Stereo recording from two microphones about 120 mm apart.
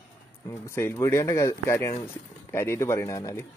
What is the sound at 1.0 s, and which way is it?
Speech, 25° left (ahead or behind).